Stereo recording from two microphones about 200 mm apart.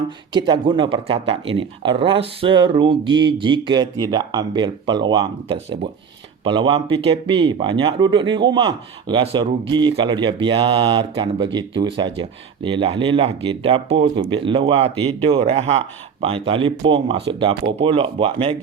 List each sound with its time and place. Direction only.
0.3 s speech: 20° right (ahead or behind)